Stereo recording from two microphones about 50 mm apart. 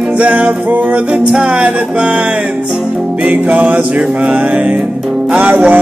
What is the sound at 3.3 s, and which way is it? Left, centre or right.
Music, right.